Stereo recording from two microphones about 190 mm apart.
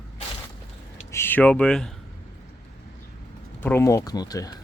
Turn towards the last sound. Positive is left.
turn(degrees=20)  # may be behind; listen again after turning